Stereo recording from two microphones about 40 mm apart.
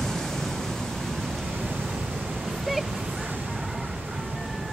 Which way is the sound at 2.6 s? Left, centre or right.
Centre.